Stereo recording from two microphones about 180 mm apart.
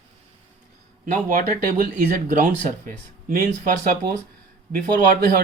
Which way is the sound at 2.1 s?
45° right (ahead or behind).